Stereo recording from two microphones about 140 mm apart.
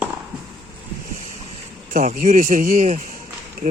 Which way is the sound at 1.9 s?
75° right (ahead or behind).